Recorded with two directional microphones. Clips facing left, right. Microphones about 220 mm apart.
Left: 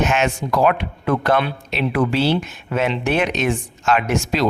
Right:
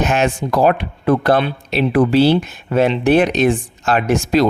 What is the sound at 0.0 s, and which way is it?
Speech, 35° right (ahead or behind).